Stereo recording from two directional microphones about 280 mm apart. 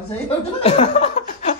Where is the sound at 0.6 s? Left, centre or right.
Left.